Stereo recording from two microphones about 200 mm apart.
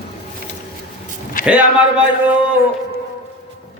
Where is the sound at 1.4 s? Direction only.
45° left (ahead or behind).